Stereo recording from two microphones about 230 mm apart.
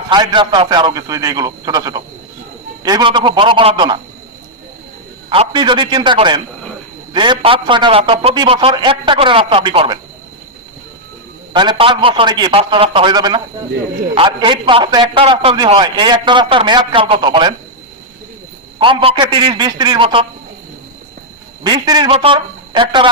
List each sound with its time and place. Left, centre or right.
0.1 s a man's voice: centre
5.3 s a man's voice: right
11.5 s a man's voice: centre
18.8 s a man's voice: right
21.6 s a man's voice: centre